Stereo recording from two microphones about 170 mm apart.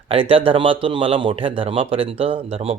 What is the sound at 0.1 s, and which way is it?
Speech, 35° right (ahead or behind).